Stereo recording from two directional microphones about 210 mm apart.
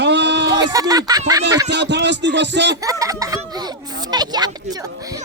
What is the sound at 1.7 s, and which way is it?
Speech, 55° right (ahead or behind).